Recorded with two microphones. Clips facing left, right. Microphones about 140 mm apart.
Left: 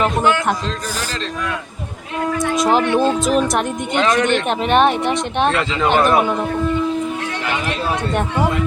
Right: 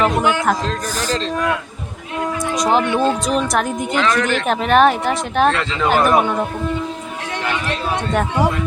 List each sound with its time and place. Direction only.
0.2 s speech: 10° right (ahead or behind)
2.6 s speech: centre (ahead or behind)
4.0 s speech: 25° left (ahead or behind)
4.3 s speech: centre (ahead or behind)